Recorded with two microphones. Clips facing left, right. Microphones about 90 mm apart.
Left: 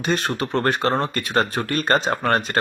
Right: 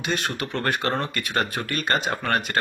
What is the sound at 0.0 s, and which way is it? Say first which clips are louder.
Speech: left 4 dB; 40° left (ahead or behind).